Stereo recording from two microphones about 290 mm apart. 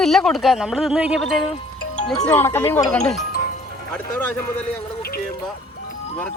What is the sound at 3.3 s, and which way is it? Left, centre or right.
Music, left.